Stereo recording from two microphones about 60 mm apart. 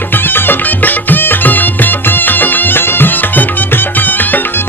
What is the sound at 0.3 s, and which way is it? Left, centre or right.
Music, left.